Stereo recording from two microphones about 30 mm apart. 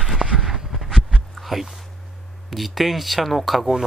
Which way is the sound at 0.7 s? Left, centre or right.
Centre.